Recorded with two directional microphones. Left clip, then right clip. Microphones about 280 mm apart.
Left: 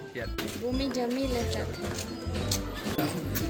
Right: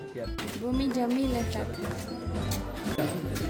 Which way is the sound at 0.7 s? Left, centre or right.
Right.